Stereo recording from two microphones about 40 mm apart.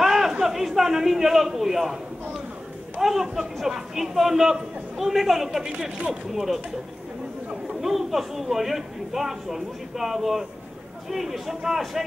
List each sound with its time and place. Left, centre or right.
0.0 s a sound: centre
3.0 s speech: centre
5.6 s a man's voice: right
6.3 s speech: centre
7.6 s speech: centre